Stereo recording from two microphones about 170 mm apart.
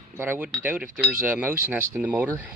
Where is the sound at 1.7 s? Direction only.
10° right (ahead or behind).